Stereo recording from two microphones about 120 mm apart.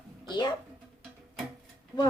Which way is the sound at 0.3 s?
40° left (ahead or behind).